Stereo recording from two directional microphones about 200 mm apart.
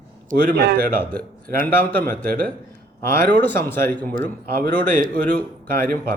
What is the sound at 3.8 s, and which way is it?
Speech, 5° left (ahead or behind).